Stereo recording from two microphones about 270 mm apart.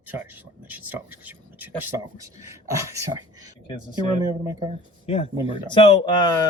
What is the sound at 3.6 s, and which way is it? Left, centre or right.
Speech, centre.